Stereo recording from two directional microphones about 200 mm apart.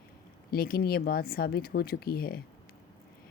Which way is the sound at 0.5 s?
50° left (ahead or behind).